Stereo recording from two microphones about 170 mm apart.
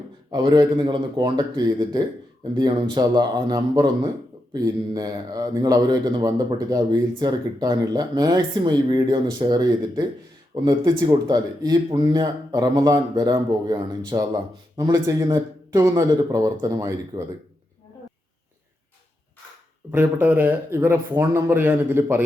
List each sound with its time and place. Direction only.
0.3 s speech: 25° right (ahead or behind)
19.9 s speech: 10° right (ahead or behind)